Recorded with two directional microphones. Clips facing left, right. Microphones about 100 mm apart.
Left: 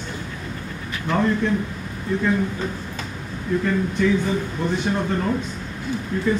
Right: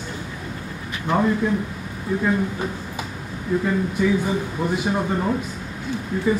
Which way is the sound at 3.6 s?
10° right (ahead or behind).